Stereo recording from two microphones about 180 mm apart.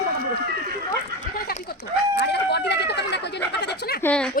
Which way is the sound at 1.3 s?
55° left (ahead or behind).